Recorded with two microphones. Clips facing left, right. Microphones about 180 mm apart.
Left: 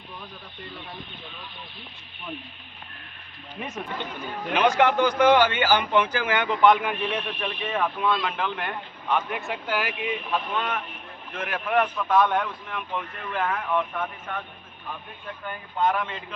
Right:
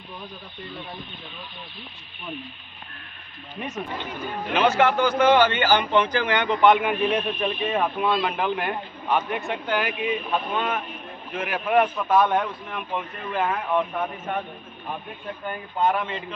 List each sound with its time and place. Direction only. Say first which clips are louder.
4.5 s a man's voice: right 1 dB; 15° left (ahead or behind); by 8.3 s 25° right (ahead or behind)
8.3 s a man's voice: right 4 dB; 15° right (ahead or behind)
9.1 s a man's voice: right 2 dB; centre (ahead or behind); by 14.4 s 20° right (ahead or behind)
15.8 s a man's voice: right 1 dB; 5° right (ahead or behind)